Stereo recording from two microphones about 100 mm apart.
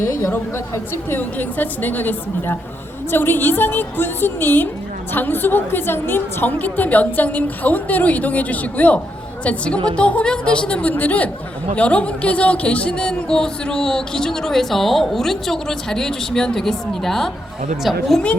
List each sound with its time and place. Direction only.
0.0 s a woman's voice: 25° left (ahead or behind); by 18.0 s centre (ahead or behind)